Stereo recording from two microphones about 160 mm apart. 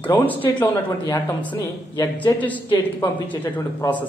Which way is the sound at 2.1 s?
10° left (ahead or behind).